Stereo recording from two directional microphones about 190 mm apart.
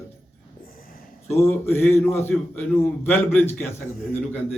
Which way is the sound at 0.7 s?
50° left (ahead or behind).